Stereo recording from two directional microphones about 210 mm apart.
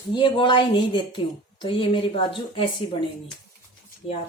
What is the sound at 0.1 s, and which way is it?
A woman's voice, 25° left (ahead or behind).